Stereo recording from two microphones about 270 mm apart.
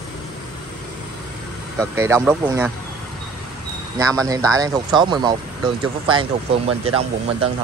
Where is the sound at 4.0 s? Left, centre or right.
Centre.